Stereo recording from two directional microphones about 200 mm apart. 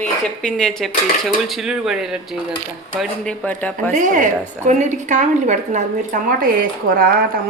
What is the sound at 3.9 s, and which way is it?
A woman's voice, 40° right (ahead or behind).